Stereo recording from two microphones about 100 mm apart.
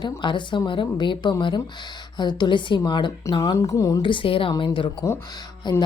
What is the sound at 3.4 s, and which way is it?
Speech, 35° left (ahead or behind).